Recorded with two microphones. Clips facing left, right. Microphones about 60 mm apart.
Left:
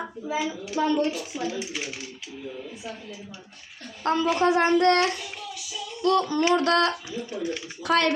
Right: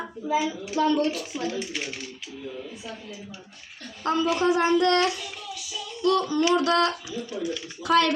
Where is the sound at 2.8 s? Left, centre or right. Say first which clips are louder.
Left 4 dB; left.